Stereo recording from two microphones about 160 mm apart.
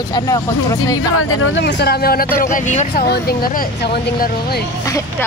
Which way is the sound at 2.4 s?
55° left (ahead or behind).